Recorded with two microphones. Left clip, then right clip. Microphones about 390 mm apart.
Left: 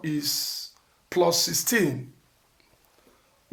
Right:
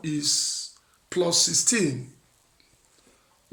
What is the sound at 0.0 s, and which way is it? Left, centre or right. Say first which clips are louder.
Speech: right 2 dB; centre.